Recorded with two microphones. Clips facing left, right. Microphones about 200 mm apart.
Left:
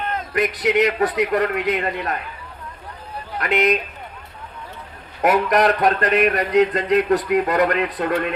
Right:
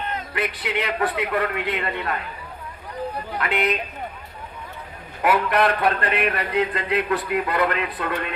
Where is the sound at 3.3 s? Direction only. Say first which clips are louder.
Left 5 dB; 40° left (ahead or behind).